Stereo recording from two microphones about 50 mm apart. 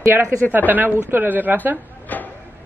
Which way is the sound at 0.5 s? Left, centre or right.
Right.